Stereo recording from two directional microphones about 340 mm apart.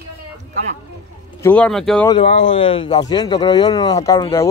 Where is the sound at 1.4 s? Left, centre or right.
Centre.